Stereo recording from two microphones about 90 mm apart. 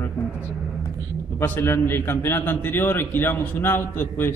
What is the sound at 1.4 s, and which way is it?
A man's voice, 25° left (ahead or behind).